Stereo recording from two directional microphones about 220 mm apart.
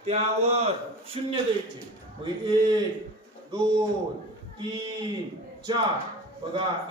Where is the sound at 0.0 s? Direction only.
30° right (ahead or behind).